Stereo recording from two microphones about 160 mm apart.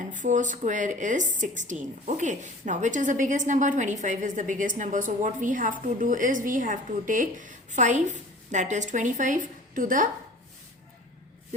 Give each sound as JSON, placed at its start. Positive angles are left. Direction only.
{"t": 0.0, "sound": "a woman's voice", "side_deg": -50}